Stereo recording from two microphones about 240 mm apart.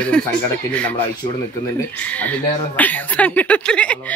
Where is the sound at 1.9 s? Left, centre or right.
Centre.